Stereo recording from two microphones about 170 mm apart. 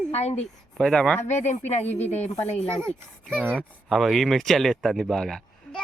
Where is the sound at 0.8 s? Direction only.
5° left (ahead or behind).